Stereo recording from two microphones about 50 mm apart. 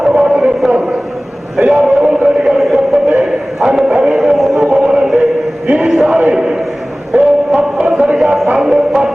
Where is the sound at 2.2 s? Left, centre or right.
Centre.